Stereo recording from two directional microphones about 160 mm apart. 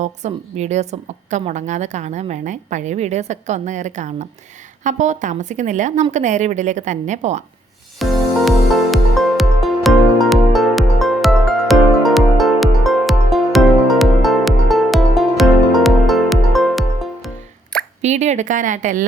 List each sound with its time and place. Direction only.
0.0 s a woman's voice: 45° right (ahead or behind)
7.9 s music: centre (ahead or behind)
18.0 s a woman's voice: 45° right (ahead or behind)